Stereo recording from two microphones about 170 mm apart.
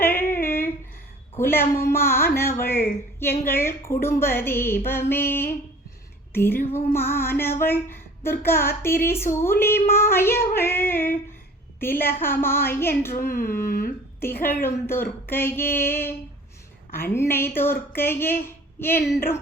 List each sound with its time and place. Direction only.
0.0 s female singing: 15° left (ahead or behind)
0.4 s a sound: 15° left (ahead or behind)
1.4 s a woman's voice: 15° left (ahead or behind)